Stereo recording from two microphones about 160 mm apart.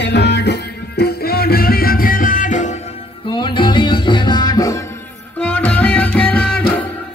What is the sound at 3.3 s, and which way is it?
Music, 30° left (ahead or behind).